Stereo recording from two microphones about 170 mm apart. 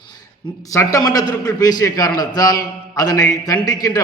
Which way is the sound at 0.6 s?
20° left (ahead or behind).